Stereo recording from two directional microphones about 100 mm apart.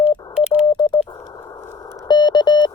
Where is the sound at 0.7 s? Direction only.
45° left (ahead or behind).